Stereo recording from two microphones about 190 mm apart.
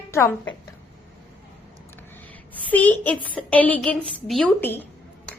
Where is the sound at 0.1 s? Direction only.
15° left (ahead or behind).